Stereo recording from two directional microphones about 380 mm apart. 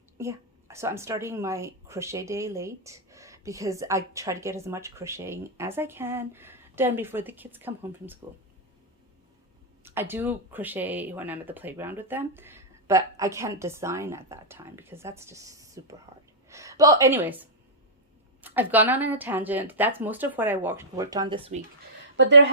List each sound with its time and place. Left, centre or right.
0.2 s speech: centre
9.8 s speech: centre
22.2 s a woman's voice: right